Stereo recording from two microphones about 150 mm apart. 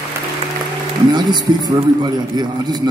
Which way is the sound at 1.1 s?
30° right (ahead or behind).